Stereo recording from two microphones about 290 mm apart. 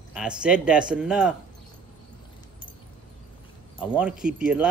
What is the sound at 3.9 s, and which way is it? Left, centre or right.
Speech, centre.